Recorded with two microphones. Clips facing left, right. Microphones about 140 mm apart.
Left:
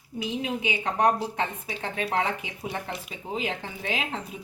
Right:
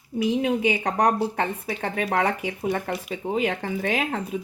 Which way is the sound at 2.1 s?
55° right (ahead or behind).